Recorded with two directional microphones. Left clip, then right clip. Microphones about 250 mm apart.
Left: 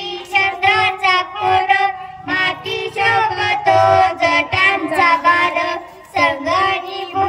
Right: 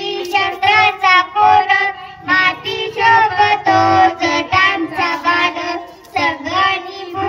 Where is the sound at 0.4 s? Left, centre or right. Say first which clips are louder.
Right 2 dB; centre.